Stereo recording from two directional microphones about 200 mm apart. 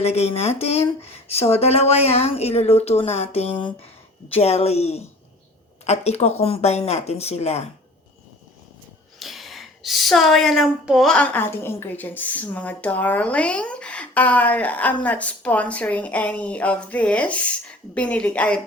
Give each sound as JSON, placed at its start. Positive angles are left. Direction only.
{"t": 0.0, "sound": "speech", "side_deg": 30}
{"t": 9.1, "sound": "a woman's voice", "side_deg": 0}